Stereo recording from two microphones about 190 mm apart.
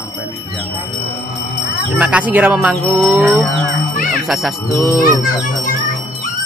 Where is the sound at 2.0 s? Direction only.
5° right (ahead or behind).